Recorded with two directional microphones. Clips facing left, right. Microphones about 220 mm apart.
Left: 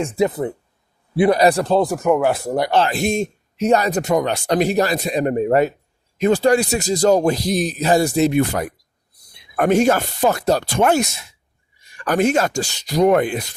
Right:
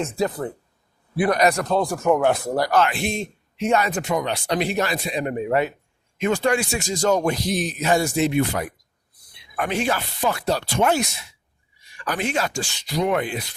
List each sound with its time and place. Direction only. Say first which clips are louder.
0.0 s speech: left 5 dB; 20° left (ahead or behind)
2.0 s speech: left 2 dB; 5° left (ahead or behind)
2.6 s speech: left 2 dB; 25° left (ahead or behind); by 13.5 s 45° left (ahead or behind)